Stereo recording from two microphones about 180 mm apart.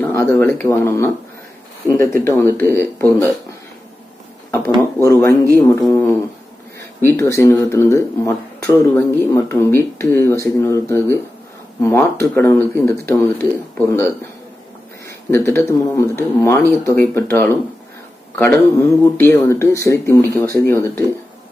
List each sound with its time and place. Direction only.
0.0 s speech: 10° left (ahead or behind)
4.8 s speech: 15° left (ahead or behind)